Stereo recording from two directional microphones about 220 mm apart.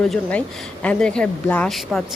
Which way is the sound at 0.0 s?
5° left (ahead or behind).